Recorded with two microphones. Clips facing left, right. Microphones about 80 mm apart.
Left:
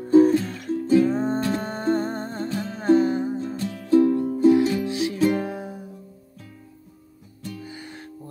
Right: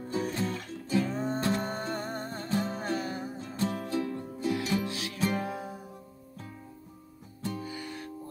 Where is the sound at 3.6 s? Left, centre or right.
Right.